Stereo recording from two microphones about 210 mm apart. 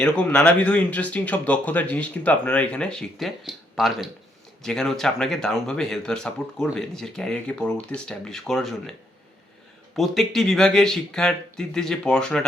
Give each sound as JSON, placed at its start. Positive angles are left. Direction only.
{"t": 0.0, "sound": "speech", "side_deg": 5}
{"t": 9.9, "sound": "speech", "side_deg": 0}